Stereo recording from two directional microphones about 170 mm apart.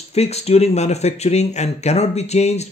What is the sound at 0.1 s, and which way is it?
Speech, 40° left (ahead or behind).